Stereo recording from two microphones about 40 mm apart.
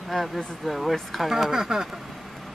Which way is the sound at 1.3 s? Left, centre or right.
Centre.